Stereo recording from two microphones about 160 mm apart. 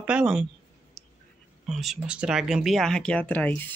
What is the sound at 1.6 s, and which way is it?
Speech, centre (ahead or behind).